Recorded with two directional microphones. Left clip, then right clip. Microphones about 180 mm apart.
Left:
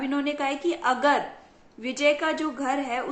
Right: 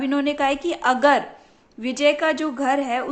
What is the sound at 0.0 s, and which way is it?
A woman's voice, 45° right (ahead or behind).